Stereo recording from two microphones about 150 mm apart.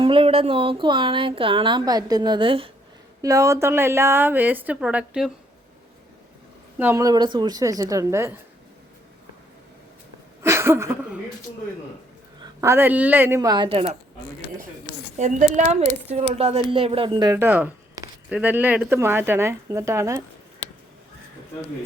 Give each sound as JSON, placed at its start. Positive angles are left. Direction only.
{"t": 0.0, "sound": "speech", "side_deg": -35}
{"t": 3.2, "sound": "a woman's voice", "side_deg": -20}
{"t": 6.7, "sound": "a woman's voice", "side_deg": -20}
{"t": 10.4, "sound": "a sound", "side_deg": -20}
{"t": 12.4, "sound": "speech", "side_deg": -20}
{"t": 13.7, "sound": "speech", "side_deg": -40}
{"t": 15.2, "sound": "a woman's voice", "side_deg": -50}
{"t": 17.3, "sound": "a woman's voice", "side_deg": -15}